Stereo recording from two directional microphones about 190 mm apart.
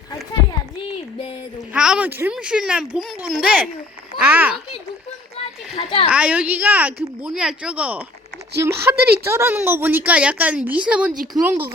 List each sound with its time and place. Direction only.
1.7 s speech: 5° right (ahead or behind)
4.2 s a sound: 10° right (ahead or behind)
5.7 s a child's voice: 30° left (ahead or behind)
6.1 s speech: 5° right (ahead or behind)